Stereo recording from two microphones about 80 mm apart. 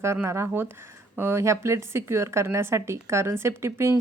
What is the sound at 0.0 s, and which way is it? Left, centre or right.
A woman's voice, right.